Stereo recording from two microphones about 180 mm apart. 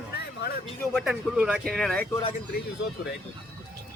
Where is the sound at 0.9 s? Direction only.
5° right (ahead or behind).